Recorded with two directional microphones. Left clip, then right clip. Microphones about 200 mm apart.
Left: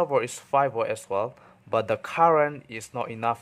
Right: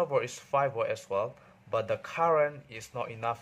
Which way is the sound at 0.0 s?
25° left (ahead or behind).